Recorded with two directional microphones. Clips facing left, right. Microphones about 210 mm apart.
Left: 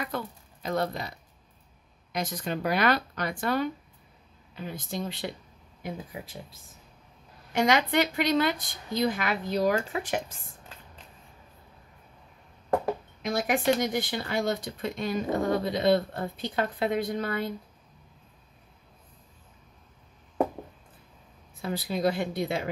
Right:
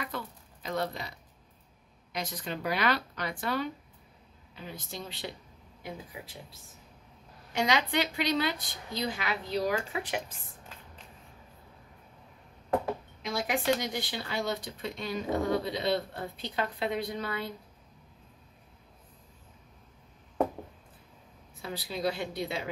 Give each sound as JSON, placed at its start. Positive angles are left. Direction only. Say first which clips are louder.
{"t": 0.0, "sound": "a sound", "louder": "left 4 dB", "side_deg": 45}
{"t": 2.1, "sound": "speech", "louder": "left 5 dB", "side_deg": 45}
{"t": 7.5, "sound": "speech", "louder": "left 5 dB", "side_deg": 50}
{"t": 13.2, "sound": "speech", "louder": "left 5 dB", "side_deg": 50}
{"t": 21.5, "sound": "speech", "louder": "left 6 dB", "side_deg": 50}